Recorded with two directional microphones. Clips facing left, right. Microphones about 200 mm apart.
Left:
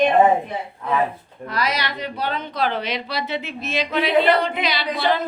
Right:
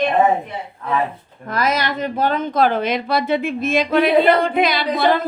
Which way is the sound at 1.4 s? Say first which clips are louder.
Right 4 dB; 50° right (ahead or behind).